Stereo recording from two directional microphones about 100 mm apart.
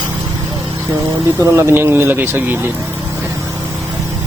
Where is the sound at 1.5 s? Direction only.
25° right (ahead or behind).